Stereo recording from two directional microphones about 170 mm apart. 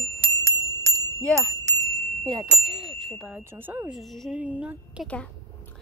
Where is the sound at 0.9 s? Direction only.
5° left (ahead or behind).